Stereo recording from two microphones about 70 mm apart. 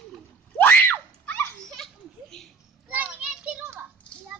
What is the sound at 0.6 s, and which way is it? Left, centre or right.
Screaming, left.